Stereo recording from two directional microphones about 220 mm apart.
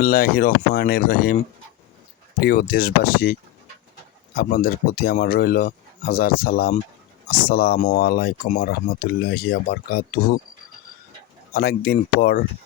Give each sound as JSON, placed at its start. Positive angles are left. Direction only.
{"t": 0.0, "sound": "speech", "side_deg": 40}
{"t": 2.4, "sound": "speech", "side_deg": 40}
{"t": 4.4, "sound": "speech", "side_deg": 45}
{"t": 11.5, "sound": "speech", "side_deg": 45}